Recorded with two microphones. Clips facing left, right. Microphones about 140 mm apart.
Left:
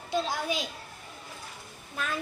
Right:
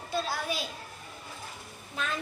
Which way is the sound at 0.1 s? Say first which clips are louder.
Left 3 dB; 15° left (ahead or behind).